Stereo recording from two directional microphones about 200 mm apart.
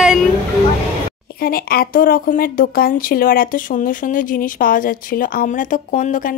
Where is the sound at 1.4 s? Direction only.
50° left (ahead or behind).